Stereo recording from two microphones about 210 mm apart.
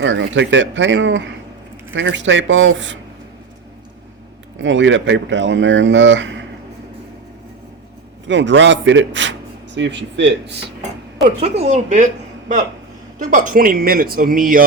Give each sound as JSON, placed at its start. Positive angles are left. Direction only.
{"t": 0.0, "sound": "speech", "side_deg": -60}
{"t": 4.5, "sound": "speech", "side_deg": -60}
{"t": 8.3, "sound": "speech", "side_deg": -60}
{"t": 11.3, "sound": "a man's voice", "side_deg": -30}
{"t": 13.1, "sound": "a man's voice", "side_deg": -40}